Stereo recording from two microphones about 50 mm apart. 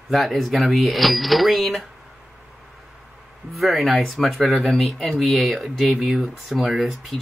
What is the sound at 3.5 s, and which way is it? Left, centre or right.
Speech, centre.